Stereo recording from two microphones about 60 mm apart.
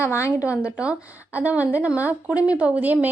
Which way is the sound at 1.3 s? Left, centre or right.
Right.